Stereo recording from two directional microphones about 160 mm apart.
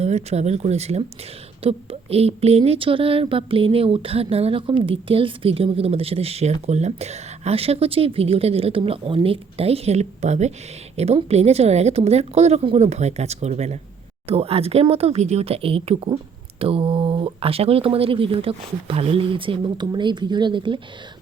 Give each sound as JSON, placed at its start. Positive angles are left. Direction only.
{"t": 0.0, "sound": "a woman's voice", "side_deg": -45}